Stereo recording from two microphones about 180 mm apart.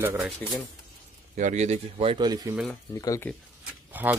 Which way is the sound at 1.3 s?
40° right (ahead or behind).